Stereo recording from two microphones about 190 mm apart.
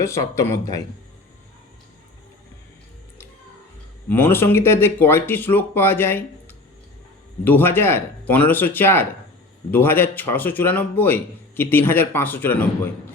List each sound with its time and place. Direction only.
0.0 s a man's voice: 15° left (ahead or behind)
4.1 s a man's voice: 10° left (ahead or behind)
7.4 s a man's voice: 10° left (ahead or behind)